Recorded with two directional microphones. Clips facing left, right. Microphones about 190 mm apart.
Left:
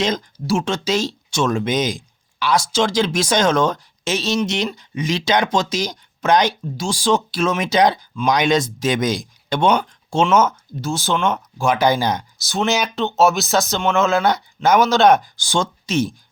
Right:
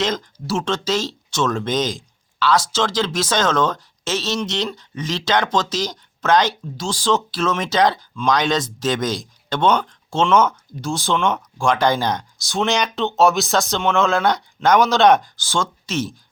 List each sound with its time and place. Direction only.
0.0 s speech: 15° left (ahead or behind)
15.4 s speech: 15° left (ahead or behind)